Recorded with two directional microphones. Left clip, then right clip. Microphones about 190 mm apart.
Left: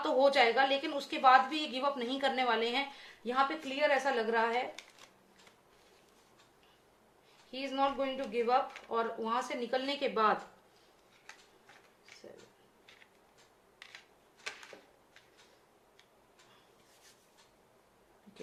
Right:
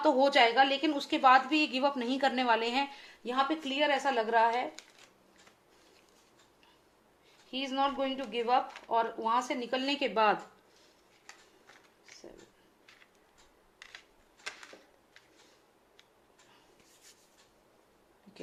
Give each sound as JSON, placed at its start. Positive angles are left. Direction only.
{"t": 0.0, "sound": "a woman's voice", "side_deg": -45}
{"t": 7.5, "sound": "a woman's voice", "side_deg": -45}
{"t": 13.7, "sound": "a sound", "side_deg": -20}